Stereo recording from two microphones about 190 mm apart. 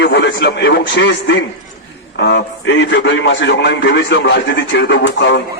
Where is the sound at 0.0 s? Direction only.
65° left (ahead or behind).